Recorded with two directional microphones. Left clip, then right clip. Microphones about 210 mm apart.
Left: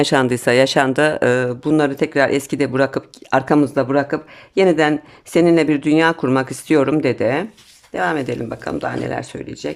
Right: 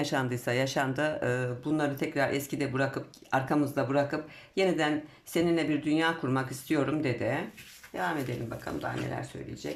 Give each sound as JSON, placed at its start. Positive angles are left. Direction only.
{"t": 0.0, "sound": "speech", "side_deg": 45}